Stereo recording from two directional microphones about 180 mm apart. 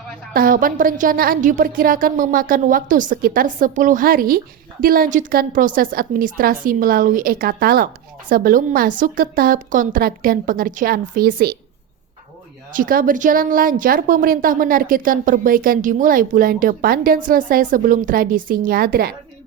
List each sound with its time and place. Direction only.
0.3 s speech: 50° right (ahead or behind)
12.7 s speech: 50° right (ahead or behind)